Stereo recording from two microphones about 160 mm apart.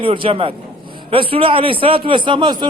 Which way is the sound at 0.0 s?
35° right (ahead or behind).